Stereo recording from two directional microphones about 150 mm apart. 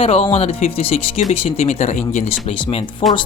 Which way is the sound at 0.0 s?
40° left (ahead or behind).